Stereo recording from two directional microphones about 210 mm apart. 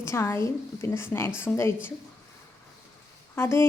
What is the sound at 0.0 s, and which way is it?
Speech, 15° left (ahead or behind).